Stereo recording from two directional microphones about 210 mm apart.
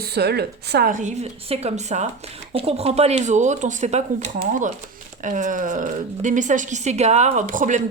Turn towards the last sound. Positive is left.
turn(degrees=-35)  # may be behind; listen again after turning